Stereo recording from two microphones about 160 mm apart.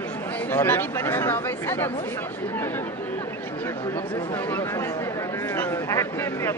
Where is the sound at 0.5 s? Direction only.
10° left (ahead or behind).